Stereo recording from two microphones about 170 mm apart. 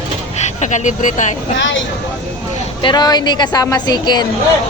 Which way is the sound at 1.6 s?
90° left.